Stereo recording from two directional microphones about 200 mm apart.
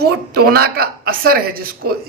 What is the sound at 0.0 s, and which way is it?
Speech, 50° right (ahead or behind).